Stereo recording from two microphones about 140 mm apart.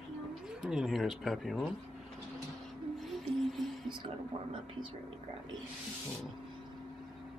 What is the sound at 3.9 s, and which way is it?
Whispering, 35° right (ahead or behind).